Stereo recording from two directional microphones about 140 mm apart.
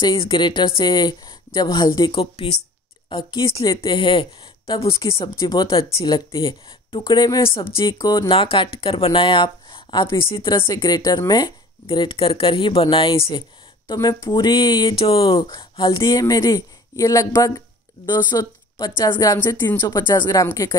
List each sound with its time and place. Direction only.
0.0 s speech: 35° left (ahead or behind)
5.4 s speech: 30° left (ahead or behind)
8.3 s a woman's voice: 40° left (ahead or behind)
19.1 s speech: 20° left (ahead or behind)
19.9 s speech: 30° left (ahead or behind)